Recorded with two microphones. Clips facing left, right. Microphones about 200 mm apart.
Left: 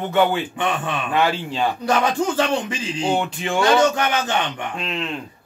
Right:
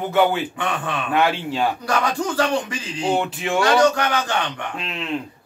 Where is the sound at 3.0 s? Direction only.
Centre (ahead or behind).